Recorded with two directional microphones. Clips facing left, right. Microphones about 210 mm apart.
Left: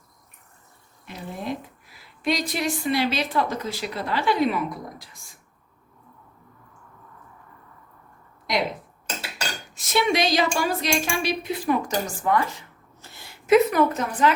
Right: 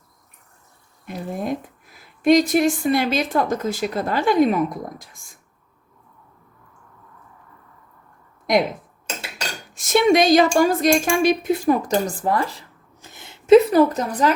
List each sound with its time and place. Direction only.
1.0 s a woman's voice: 45° right (ahead or behind)
9.7 s a sound: 45° right (ahead or behind)
13.0 s speech: 20° right (ahead or behind); by 14.3 s 40° right (ahead or behind)